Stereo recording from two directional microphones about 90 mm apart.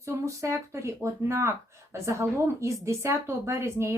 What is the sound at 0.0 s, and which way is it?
Speech, 35° right (ahead or behind).